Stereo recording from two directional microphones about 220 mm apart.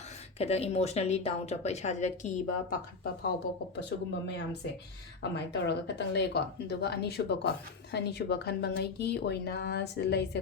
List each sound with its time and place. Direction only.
0.3 s a woman's voice: 30° left (ahead or behind)
3.8 s speech: 50° left (ahead or behind)